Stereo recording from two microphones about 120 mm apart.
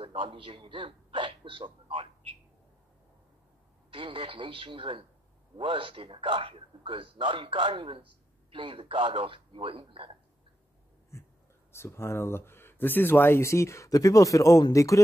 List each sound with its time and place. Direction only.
0.0 s a man's voice: 50° right (ahead or behind)
3.9 s a man's voice: 45° right (ahead or behind)
11.1 s a sound: 25° left (ahead or behind)
11.7 s speech: 20° left (ahead or behind)